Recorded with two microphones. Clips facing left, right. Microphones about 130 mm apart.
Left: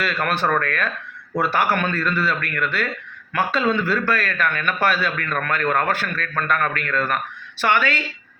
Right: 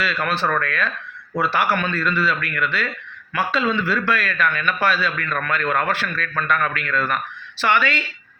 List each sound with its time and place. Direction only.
0.0 s a man's voice: 50° left (ahead or behind)